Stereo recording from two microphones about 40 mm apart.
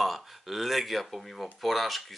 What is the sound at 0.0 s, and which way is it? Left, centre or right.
Speech, centre.